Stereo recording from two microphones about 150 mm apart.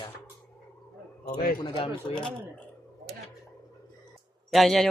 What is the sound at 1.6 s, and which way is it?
Speech, 35° left (ahead or behind).